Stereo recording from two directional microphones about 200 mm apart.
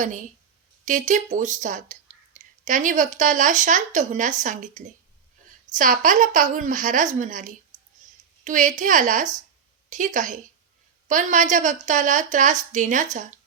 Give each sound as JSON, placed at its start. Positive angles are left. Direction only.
{"t": 0.0, "sound": "speech", "side_deg": -40}